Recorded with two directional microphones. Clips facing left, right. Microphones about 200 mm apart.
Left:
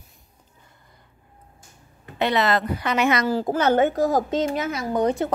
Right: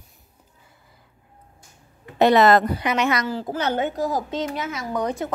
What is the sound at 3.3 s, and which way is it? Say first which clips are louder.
Speech: left 5 dB; 45° left (ahead or behind).